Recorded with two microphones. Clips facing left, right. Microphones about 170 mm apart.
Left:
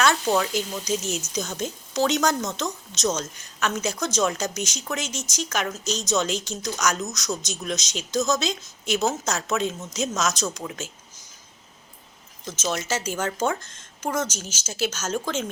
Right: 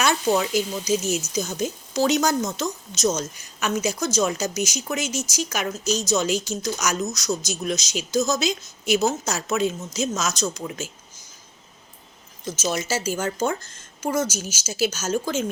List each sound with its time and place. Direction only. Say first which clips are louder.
0.0 s speech: right 1 dB; 10° right (ahead or behind)
12.5 s speech: right 2 dB; 5° right (ahead or behind)